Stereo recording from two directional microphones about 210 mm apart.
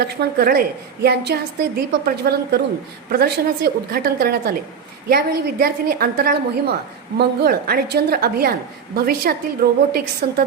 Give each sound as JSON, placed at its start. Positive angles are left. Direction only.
{"t": 0.1, "sound": "a woman's voice", "side_deg": -45}